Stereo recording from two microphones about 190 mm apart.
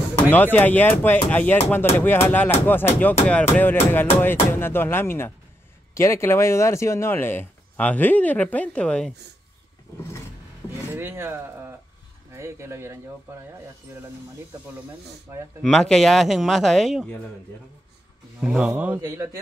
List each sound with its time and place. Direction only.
0.3 s speech: 10° left (ahead or behind)
10.9 s speech: 10° right (ahead or behind)
15.6 s speech: 5° left (ahead or behind)
18.4 s speech: 5° right (ahead or behind)
18.9 s speech: 15° right (ahead or behind)